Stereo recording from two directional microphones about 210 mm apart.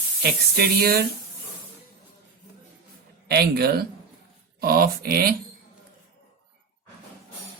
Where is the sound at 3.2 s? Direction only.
50° right (ahead or behind).